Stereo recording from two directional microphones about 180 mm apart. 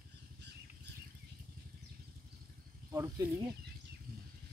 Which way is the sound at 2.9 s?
15° right (ahead or behind).